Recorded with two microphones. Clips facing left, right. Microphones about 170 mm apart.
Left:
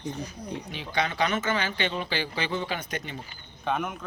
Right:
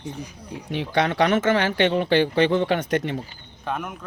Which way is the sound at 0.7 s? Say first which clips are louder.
Right 8 dB; 70° right (ahead or behind).